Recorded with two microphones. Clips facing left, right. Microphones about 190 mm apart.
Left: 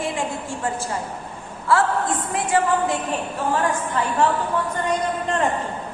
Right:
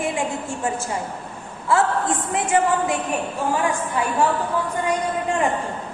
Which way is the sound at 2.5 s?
20° right (ahead or behind).